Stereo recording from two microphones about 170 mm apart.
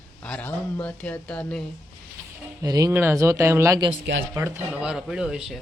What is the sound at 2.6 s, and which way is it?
Speech, 20° right (ahead or behind).